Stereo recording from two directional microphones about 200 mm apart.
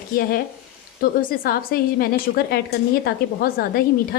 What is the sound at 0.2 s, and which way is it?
A woman's voice, 50° left (ahead or behind).